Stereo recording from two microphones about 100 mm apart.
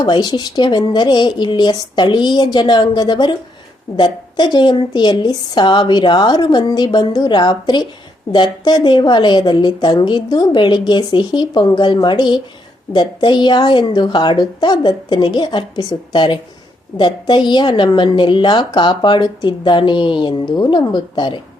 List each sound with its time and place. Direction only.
0.0 s a woman's voice: 45° left (ahead or behind)